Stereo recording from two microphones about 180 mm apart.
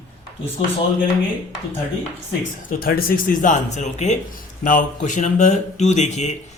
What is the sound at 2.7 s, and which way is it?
Speech, 55° left (ahead or behind).